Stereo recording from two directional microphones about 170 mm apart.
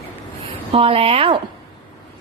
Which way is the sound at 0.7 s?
35° right (ahead or behind).